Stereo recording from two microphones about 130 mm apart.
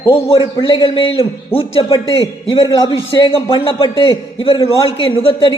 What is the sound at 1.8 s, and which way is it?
A man's voice, 25° left (ahead or behind).